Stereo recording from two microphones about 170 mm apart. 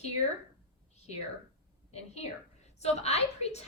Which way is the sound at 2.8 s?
40° left (ahead or behind).